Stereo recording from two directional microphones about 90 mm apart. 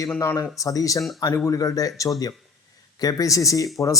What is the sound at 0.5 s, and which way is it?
A man's voice, 40° left (ahead or behind).